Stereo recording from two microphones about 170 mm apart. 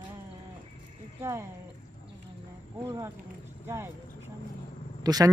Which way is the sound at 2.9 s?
15° right (ahead or behind).